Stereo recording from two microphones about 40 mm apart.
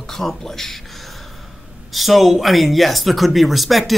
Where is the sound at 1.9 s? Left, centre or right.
Centre.